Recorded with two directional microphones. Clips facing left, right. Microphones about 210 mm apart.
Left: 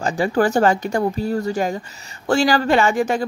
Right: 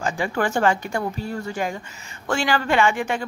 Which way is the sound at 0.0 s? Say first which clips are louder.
Left 6 dB; 40° left (ahead or behind).